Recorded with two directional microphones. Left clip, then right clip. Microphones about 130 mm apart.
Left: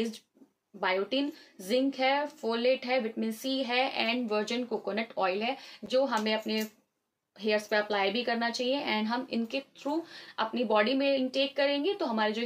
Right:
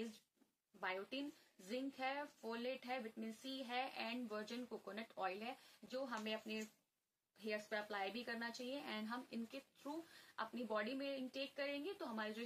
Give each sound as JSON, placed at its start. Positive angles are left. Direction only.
{"t": 0.7, "sound": "speech", "side_deg": 15}